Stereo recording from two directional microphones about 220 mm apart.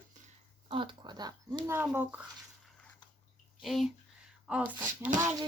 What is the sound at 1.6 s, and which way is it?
Speech, 10° right (ahead or behind).